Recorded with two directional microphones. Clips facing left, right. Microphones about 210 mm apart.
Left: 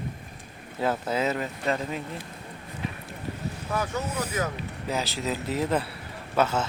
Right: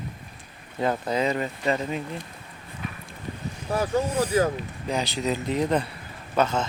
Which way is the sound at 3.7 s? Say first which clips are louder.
Right 6 dB; 30° right (ahead or behind).